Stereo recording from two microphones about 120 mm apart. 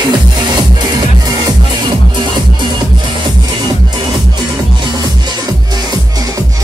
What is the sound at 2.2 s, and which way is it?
Music, 40° right (ahead or behind).